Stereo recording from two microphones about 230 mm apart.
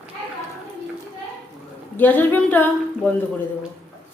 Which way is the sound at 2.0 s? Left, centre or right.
Centre.